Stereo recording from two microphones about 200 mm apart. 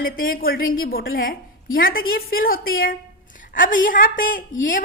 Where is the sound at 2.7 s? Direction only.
45° left (ahead or behind).